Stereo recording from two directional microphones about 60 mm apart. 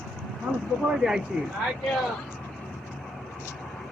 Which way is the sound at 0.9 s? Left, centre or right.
Centre.